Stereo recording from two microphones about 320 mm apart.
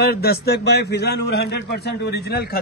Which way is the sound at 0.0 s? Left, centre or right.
Left.